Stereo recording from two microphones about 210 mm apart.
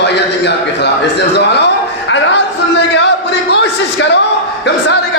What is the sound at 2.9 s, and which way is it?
Music, 55° left (ahead or behind).